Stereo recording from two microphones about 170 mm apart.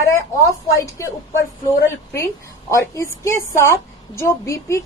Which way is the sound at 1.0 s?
15° left (ahead or behind).